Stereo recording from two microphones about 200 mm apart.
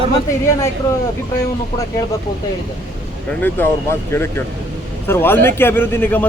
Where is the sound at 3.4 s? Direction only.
10° left (ahead or behind).